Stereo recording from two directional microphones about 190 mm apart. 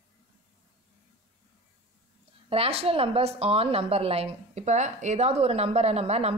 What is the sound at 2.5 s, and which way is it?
A woman's voice, 30° right (ahead or behind).